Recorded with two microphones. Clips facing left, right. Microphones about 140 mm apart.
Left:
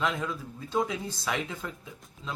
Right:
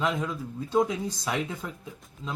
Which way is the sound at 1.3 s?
5° right (ahead or behind).